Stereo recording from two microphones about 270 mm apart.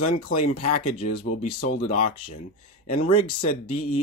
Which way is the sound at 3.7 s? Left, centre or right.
Left.